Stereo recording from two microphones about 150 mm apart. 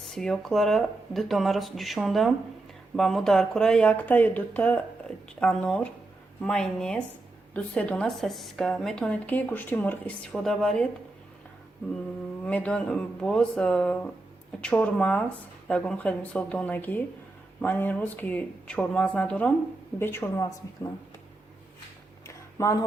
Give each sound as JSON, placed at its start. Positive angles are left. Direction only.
{"t": 0.0, "sound": "speech", "side_deg": 5}
{"t": 12.4, "sound": "a woman's voice", "side_deg": 10}
{"t": 22.3, "sound": "a sound", "side_deg": 20}